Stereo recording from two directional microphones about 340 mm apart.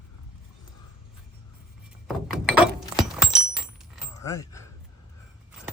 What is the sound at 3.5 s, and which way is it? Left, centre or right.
Keys jangling, centre.